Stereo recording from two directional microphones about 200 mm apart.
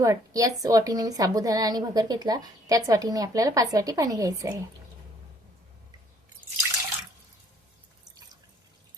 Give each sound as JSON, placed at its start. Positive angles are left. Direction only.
{"t": 0.0, "sound": "a woman's voice", "side_deg": -15}